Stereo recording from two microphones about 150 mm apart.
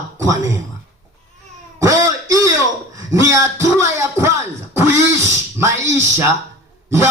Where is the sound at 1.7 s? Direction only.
20° right (ahead or behind).